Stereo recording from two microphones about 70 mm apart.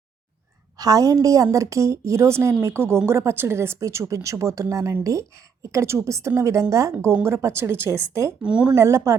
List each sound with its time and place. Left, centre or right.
0.8 s a woman's voice: right
7.1 s a woman's voice: right
8.4 s speech: centre
8.7 s a woman's voice: right